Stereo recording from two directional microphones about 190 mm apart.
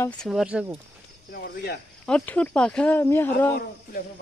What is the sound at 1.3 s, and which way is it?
Speech, 60° left (ahead or behind).